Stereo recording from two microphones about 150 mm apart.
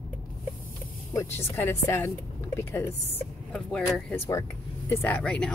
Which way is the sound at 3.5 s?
5° left (ahead or behind).